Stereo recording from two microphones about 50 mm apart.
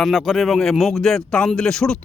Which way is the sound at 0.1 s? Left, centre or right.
Centre.